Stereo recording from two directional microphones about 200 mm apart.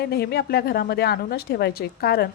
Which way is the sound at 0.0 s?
55° left (ahead or behind).